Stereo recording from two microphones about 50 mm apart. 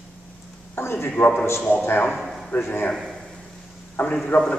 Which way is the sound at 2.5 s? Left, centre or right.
Left.